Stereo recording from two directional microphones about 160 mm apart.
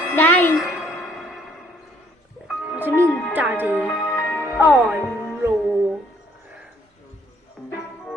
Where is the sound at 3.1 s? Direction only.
5° left (ahead or behind).